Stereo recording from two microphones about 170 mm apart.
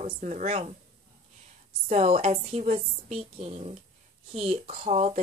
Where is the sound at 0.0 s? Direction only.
45° right (ahead or behind).